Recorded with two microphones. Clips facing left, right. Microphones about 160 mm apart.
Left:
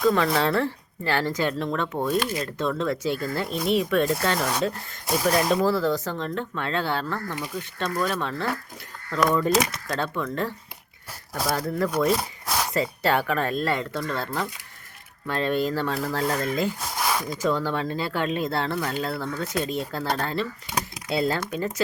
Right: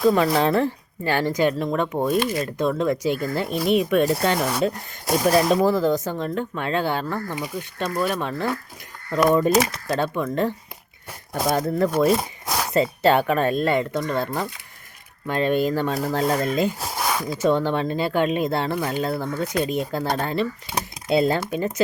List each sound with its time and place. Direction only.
0.0 s speech: 15° right (ahead or behind)